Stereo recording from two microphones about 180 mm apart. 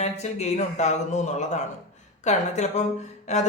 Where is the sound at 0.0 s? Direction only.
40° left (ahead or behind).